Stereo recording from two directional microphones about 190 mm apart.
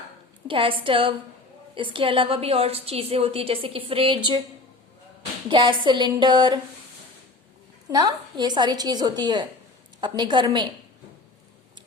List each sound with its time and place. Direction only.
0.4 s a woman's voice: 25° right (ahead or behind)
5.5 s a woman's voice: 25° right (ahead or behind)
7.9 s a woman's voice: 20° right (ahead or behind)